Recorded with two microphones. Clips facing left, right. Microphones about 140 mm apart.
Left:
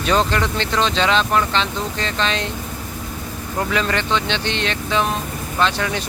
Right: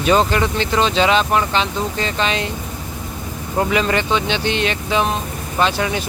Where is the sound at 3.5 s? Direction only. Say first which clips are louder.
Right 4 dB; 10° right (ahead or behind).